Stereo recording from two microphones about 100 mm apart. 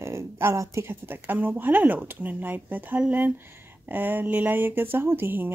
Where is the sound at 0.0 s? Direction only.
25° right (ahead or behind).